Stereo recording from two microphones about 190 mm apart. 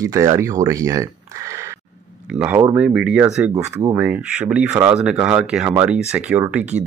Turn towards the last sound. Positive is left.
turn(degrees=-5)  # may be behind; listen again after turning